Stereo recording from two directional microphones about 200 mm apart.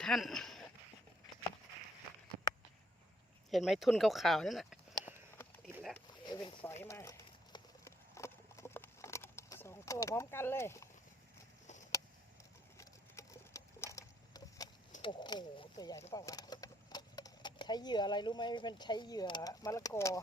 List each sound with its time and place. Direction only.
0.0 s speech: centre (ahead or behind)
3.5 s speech: centre (ahead or behind)
5.6 s a sound: centre (ahead or behind)
6.2 s speech: 20° left (ahead or behind)
6.8 s horse: 15° left (ahead or behind)
12.7 s sewing machine: 15° left (ahead or behind)
15.0 s speech: 25° left (ahead or behind)